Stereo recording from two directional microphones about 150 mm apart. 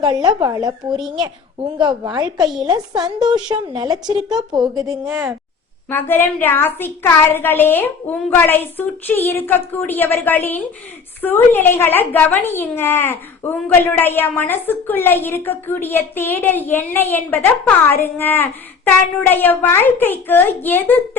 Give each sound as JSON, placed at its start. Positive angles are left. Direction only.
{"t": 0.0, "sound": "speech", "side_deg": -30}
{"t": 0.9, "sound": "speech", "side_deg": 0}
{"t": 1.8, "sound": "speech", "side_deg": -30}
{"t": 3.2, "sound": "speech", "side_deg": -5}
{"t": 3.5, "sound": "speech", "side_deg": -30}
{"t": 5.0, "sound": "speech", "side_deg": 0}
{"t": 5.9, "sound": "a woman's voice", "side_deg": 15}